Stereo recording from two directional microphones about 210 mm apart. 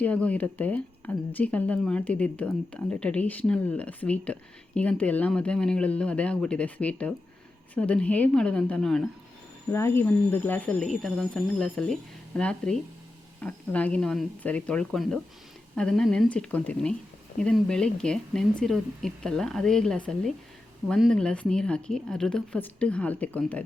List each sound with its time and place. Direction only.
0.0 s speech: 5° left (ahead or behind)